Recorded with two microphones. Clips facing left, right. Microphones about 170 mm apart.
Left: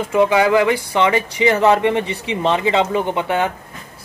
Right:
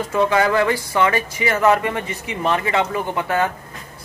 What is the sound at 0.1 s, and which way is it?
Speech, 15° left (ahead or behind).